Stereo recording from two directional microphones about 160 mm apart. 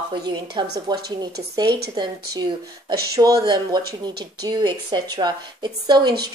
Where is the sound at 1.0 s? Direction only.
80° right.